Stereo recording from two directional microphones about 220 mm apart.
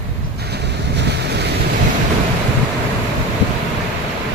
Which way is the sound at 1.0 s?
50° right (ahead or behind).